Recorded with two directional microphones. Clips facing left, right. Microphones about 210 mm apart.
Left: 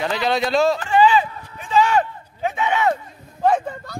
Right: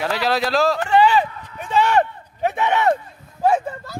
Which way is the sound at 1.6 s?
65° right (ahead or behind).